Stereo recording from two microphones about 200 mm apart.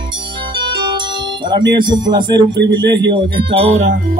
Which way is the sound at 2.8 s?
60° right (ahead or behind).